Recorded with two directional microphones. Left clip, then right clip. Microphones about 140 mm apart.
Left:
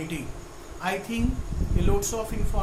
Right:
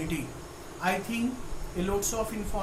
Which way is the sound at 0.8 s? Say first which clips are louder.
Even; 20° left (ahead or behind).